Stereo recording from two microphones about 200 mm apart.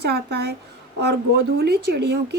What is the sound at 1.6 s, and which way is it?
Speech, 55° right (ahead or behind).